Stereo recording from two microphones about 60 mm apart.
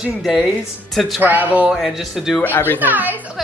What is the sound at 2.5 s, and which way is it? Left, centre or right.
Speech, left.